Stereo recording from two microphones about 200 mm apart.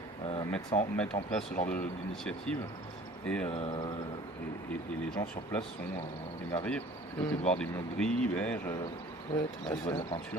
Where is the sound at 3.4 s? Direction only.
30° left (ahead or behind).